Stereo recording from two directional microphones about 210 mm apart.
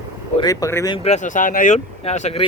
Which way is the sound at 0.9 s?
30° left (ahead or behind).